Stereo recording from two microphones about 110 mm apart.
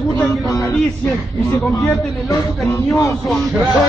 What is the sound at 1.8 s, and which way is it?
Speech, 30° left (ahead or behind).